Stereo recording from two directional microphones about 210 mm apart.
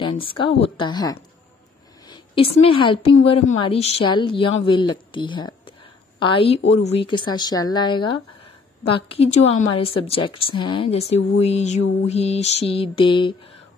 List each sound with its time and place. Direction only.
0.0 s speech: 25° left (ahead or behind)